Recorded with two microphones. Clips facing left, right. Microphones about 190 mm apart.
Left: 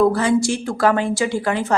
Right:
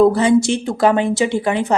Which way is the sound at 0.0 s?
20° right (ahead or behind).